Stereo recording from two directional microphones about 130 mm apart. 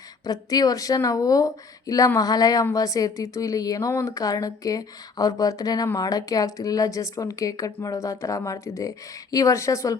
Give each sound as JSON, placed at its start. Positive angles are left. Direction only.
{"t": 0.3, "sound": "speech", "side_deg": 30}